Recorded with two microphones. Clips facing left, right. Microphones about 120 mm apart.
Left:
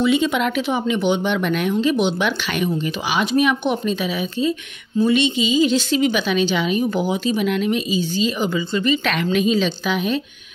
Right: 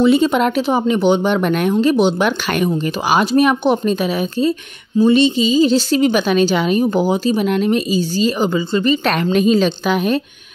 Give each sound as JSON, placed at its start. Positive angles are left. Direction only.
{"t": 0.0, "sound": "a woman's voice", "side_deg": -40}